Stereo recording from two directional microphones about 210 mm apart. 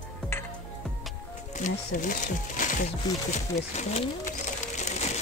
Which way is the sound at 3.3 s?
30° left (ahead or behind).